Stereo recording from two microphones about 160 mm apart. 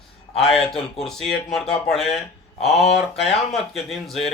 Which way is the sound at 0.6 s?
5° left (ahead or behind).